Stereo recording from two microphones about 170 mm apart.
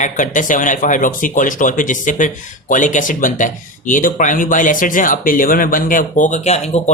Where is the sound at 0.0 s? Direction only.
50° left (ahead or behind).